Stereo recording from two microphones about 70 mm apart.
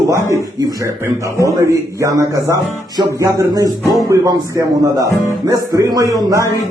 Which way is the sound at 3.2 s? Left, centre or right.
Right.